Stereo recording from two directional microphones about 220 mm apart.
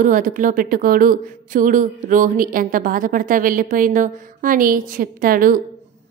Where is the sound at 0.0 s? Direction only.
35° right (ahead or behind).